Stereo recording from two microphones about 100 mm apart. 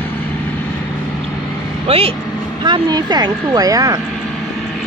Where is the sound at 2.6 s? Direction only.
45° right (ahead or behind).